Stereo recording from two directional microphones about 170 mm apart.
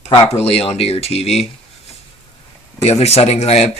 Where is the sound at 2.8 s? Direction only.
40° left (ahead or behind).